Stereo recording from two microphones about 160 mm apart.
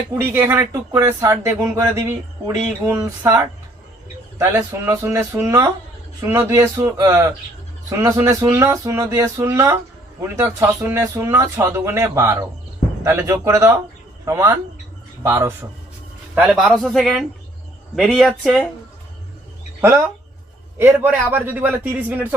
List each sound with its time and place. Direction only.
0.2 s speech: 15° right (ahead or behind)
2.8 s a sound: 20° right (ahead or behind)
4.4 s speech: 15° right (ahead or behind)
16.3 s a man's voice: 5° right (ahead or behind)
19.8 s speech: 15° right (ahead or behind)